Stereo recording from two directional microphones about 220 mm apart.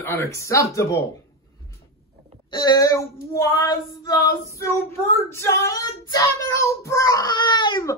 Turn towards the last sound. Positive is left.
turn(degrees=20)  # may be behind; listen again after turning